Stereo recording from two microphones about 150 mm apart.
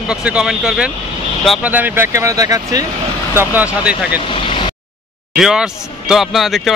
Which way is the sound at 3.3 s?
10° right (ahead or behind).